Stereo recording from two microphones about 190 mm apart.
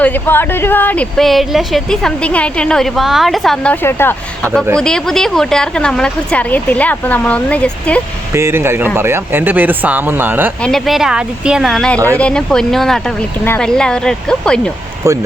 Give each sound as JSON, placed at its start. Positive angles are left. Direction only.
{"t": 0.0, "sound": "speech", "side_deg": 10}
{"t": 8.3, "sound": "speech", "side_deg": -15}
{"t": 10.6, "sound": "speech", "side_deg": 0}
{"t": 15.1, "sound": "speech", "side_deg": -15}